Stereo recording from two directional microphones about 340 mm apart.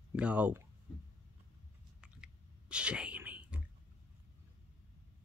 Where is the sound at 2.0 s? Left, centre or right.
Centre.